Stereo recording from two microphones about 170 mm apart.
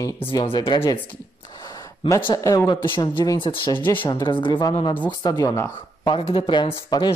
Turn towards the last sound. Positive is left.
turn(degrees=25)  # may be behind; listen again after turning